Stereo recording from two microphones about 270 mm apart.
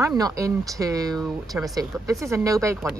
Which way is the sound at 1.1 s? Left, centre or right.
Centre.